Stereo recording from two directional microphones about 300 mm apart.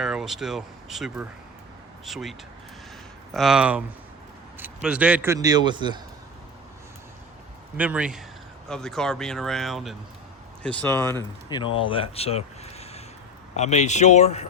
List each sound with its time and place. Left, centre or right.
0.0 s speech: centre
3.3 s a man's voice: centre
7.8 s speech: centre; by 14.4 s left